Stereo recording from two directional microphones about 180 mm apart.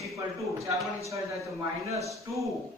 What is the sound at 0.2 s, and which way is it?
Speech, 15° right (ahead or behind).